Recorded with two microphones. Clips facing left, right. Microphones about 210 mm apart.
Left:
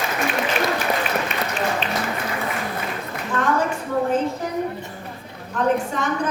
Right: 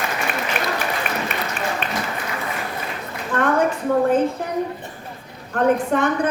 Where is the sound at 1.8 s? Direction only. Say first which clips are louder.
Left 1 dB; 55° right (ahead or behind).